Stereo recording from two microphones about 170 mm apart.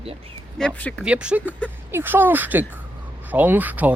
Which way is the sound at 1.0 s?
5° right (ahead or behind).